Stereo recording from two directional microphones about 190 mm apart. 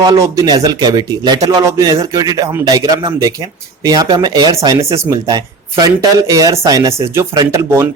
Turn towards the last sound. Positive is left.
turn(degrees=-15)  # may be behind; listen again after turning